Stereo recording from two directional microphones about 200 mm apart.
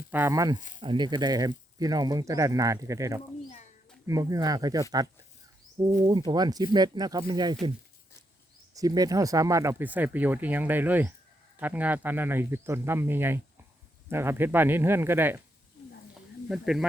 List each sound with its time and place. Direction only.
0.1 s speech: 10° right (ahead or behind)
8.7 s speech: 15° right (ahead or behind)
16.5 s speech: centre (ahead or behind)